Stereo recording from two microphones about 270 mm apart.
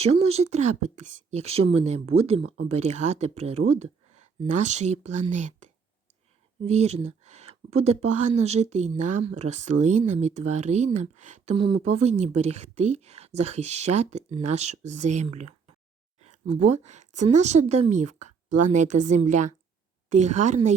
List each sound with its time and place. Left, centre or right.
0.0 s speech: right
16.6 s speech: right
18.2 s a sound: right
18.7 s speech: right